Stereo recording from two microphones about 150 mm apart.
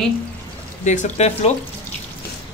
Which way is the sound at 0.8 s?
50° left (ahead or behind).